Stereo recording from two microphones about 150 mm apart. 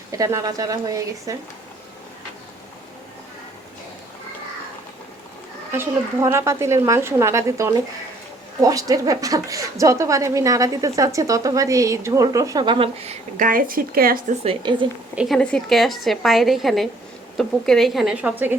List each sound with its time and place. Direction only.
0.1 s a woman's voice: 20° right (ahead or behind)
5.7 s a woman's voice: 15° right (ahead or behind); by 13.1 s 40° right (ahead or behind)
13.3 s speech: 65° right (ahead or behind)
14.4 s a woman's voice: 30° right (ahead or behind)
15.1 s a woman's voice: 5° right (ahead or behind)